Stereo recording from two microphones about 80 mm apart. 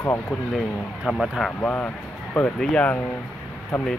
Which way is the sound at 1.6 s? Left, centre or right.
Centre.